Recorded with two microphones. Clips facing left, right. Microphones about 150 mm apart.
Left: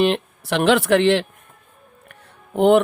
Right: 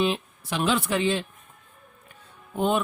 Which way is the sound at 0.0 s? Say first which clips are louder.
Left 6 dB; 70° left (ahead or behind).